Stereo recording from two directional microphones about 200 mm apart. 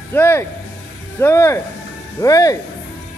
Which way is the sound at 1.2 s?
15° left (ahead or behind).